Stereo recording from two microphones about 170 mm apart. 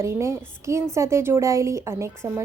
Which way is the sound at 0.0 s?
15° right (ahead or behind).